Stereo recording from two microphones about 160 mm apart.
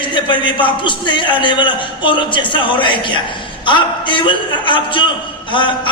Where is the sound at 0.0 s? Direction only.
30° left (ahead or behind).